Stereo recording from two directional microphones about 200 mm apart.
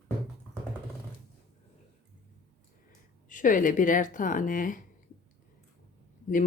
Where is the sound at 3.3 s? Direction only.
40° left (ahead or behind).